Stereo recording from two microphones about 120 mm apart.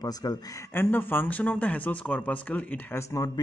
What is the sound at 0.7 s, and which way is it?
Speech, 15° left (ahead or behind).